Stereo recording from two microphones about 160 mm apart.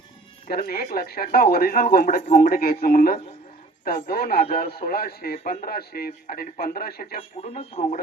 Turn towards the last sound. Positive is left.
turn(degrees=70)  # may be behind; listen again after turning